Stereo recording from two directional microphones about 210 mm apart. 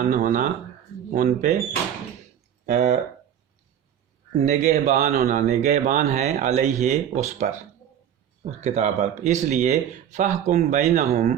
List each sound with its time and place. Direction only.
0.1 s speech: 35° right (ahead or behind)
2.6 s speech: 35° right (ahead or behind)
4.4 s speech: 35° right (ahead or behind)